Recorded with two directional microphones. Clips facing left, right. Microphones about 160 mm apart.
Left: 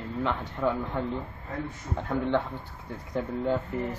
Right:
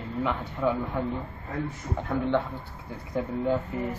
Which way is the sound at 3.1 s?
5° right (ahead or behind).